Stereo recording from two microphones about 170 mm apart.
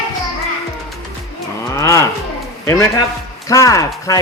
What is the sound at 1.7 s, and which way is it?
Speech, 20° left (ahead or behind).